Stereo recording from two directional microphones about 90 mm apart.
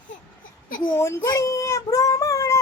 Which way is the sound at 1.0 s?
40° left (ahead or behind).